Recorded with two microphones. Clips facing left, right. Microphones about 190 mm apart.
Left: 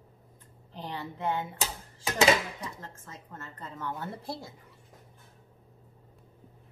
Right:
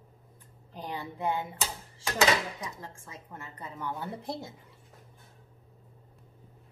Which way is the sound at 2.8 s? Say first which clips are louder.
Right 1 dB; 10° right (ahead or behind).